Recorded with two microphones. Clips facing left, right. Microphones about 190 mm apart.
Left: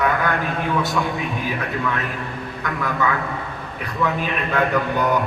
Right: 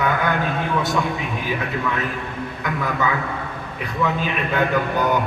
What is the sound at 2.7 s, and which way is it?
Speech, centre (ahead or behind).